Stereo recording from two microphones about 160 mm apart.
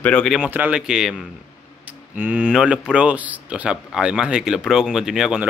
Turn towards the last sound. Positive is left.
turn(degrees=-5)  # may be behind; listen again after turning